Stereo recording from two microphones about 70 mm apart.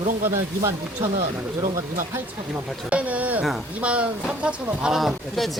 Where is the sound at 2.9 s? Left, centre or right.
Right.